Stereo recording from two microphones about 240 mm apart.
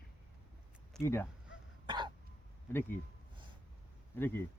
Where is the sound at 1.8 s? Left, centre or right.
Centre.